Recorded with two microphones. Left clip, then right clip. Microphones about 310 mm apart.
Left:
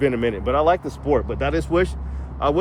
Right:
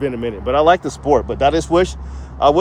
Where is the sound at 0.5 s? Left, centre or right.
Right.